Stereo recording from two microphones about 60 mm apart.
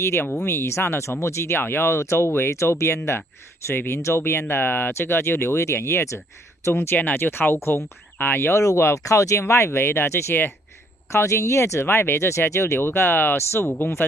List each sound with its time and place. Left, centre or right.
0.0 s speech: left
8.9 s speech: left
9.4 s speech: left
11.1 s speech: left
13.4 s speech: left
13.7 s speech: left